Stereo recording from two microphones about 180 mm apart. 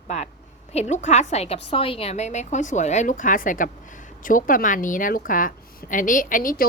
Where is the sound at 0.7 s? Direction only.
40° left (ahead or behind).